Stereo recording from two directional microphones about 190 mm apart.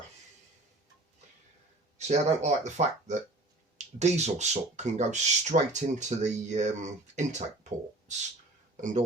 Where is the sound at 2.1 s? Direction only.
35° right (ahead or behind).